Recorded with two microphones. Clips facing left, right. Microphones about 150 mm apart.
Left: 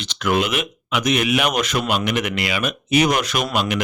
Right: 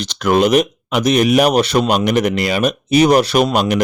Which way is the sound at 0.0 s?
40° right (ahead or behind).